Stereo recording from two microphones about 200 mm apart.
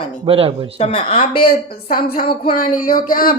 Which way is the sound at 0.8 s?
30° left (ahead or behind).